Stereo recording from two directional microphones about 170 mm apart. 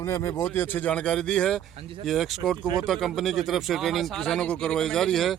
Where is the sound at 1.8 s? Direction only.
30° right (ahead or behind).